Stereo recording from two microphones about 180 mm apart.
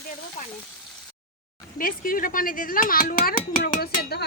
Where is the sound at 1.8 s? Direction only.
50° left (ahead or behind).